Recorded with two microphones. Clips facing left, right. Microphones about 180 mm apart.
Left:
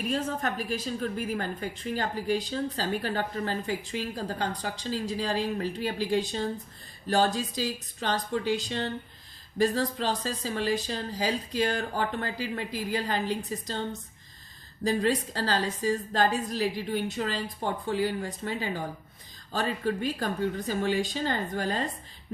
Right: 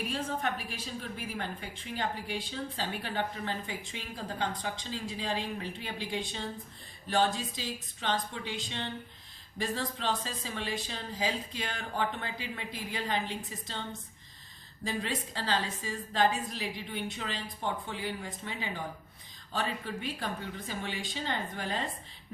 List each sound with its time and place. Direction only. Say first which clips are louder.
0.1 s a woman's voice: left 4 dB; 40° left (ahead or behind)
14.8 s a woman's voice: left 9 dB; 40° left (ahead or behind)